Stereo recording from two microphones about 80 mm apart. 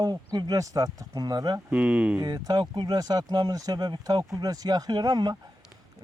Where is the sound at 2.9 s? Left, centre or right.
Right.